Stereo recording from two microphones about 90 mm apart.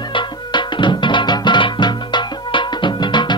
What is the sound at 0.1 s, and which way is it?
Music, 60° left (ahead or behind).